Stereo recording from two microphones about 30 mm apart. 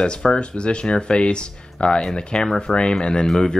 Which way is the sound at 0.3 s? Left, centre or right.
Left.